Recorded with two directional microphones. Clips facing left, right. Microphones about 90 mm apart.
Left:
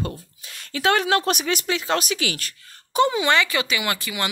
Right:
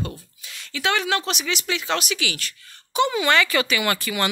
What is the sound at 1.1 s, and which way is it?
Speech, 45° left (ahead or behind).